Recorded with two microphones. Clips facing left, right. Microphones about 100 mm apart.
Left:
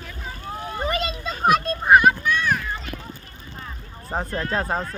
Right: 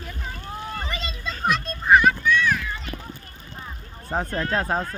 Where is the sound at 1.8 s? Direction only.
45° left (ahead or behind).